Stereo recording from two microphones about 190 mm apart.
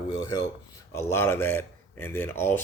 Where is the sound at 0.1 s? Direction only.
20° left (ahead or behind).